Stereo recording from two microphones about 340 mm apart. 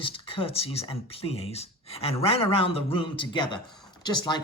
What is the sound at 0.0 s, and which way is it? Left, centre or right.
Speech, centre.